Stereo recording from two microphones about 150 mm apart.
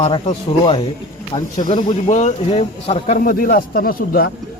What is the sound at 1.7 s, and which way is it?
Speech, 50° left (ahead or behind).